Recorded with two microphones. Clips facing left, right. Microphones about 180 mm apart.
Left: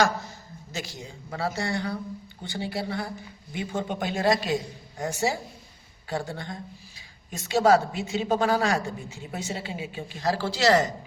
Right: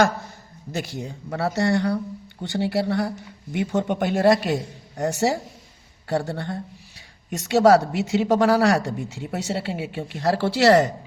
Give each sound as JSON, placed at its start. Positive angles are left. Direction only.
{"t": 0.7, "sound": "speech", "side_deg": -60}
{"t": 6.1, "sound": "speech", "side_deg": -70}